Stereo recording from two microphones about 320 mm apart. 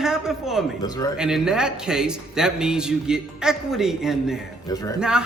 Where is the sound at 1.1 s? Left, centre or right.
Centre.